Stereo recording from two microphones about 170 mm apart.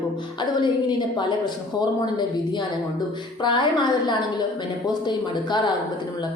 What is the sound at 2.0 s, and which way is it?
Speech, 25° left (ahead or behind).